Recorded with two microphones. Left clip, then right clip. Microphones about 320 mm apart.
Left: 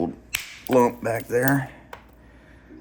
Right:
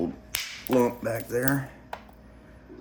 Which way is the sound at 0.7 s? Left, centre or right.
Centre.